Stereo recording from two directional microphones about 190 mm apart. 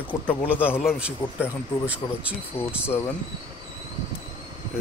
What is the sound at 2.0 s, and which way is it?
Speech, 20° left (ahead or behind).